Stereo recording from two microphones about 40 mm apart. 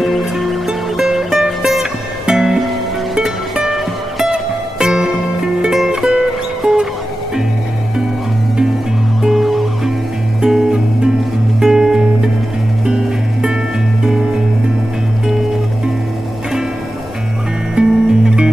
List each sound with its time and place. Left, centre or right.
0.0 s music: centre
9.2 s music: centre
10.4 s music: centre
17.7 s music: centre